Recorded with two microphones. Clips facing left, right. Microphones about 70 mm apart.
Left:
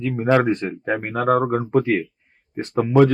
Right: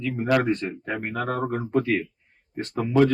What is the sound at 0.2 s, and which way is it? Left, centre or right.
A man's voice, left.